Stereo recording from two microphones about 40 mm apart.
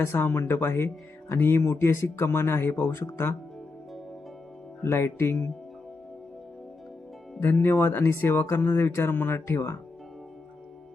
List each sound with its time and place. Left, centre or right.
0.1 s speech: left
1.3 s speech: left
4.8 s speech: left
7.6 s speech: left